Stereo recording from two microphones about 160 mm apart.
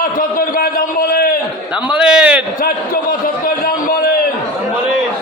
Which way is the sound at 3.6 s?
70° left (ahead or behind).